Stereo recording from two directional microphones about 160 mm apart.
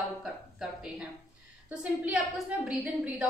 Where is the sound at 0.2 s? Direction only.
5° right (ahead or behind).